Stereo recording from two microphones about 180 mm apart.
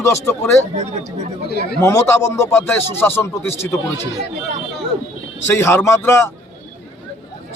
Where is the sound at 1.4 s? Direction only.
65° left (ahead or behind).